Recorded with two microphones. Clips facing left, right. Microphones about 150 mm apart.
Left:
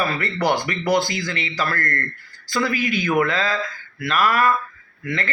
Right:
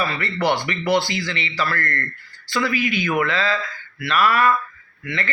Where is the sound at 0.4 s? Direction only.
45° left (ahead or behind).